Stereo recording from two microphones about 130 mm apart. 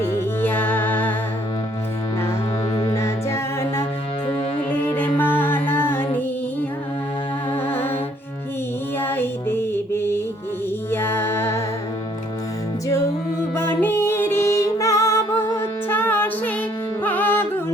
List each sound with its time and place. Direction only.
0.0 s music: 15° left (ahead or behind)
2.7 s music: 20° left (ahead or behind)
7.5 s music: 15° left (ahead or behind)
9.0 s music: 15° left (ahead or behind)
13.6 s music: 15° left (ahead or behind)
17.0 s carnatic music: 15° left (ahead or behind)